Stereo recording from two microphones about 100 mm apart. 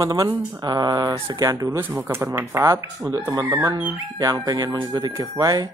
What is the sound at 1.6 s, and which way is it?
Speech, 25° right (ahead or behind).